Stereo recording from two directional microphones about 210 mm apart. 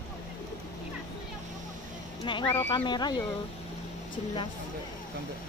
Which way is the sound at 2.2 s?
20° left (ahead or behind).